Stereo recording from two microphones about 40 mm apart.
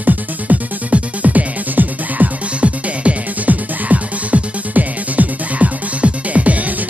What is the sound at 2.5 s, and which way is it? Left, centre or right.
Music, right.